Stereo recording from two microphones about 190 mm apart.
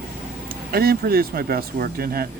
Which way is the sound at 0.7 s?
50° right (ahead or behind).